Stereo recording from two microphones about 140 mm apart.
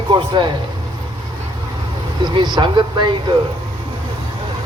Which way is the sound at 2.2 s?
30° right (ahead or behind).